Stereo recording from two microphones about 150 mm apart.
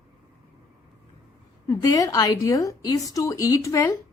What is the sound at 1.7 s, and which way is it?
Speech, 25° left (ahead or behind).